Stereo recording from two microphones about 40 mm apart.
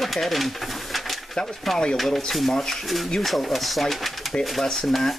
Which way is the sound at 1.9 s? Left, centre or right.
Centre.